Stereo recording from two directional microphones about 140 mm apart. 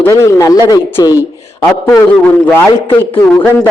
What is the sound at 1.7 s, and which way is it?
A man's voice, 10° left (ahead or behind).